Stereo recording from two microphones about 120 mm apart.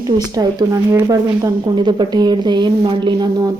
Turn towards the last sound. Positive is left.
turn(degrees=-40)  # may be behind; listen again after turning